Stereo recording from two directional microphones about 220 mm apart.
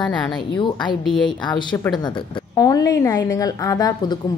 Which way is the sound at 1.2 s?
20° left (ahead or behind).